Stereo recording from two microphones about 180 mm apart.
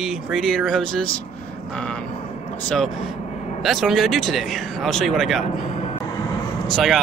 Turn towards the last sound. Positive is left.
turn(degrees=0)  # may be behind; listen again after turning